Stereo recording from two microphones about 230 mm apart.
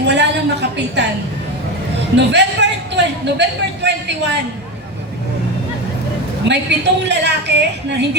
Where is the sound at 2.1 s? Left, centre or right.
Right.